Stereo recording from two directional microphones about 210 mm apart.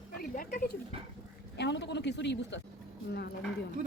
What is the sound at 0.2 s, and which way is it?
Speech, 40° left (ahead or behind).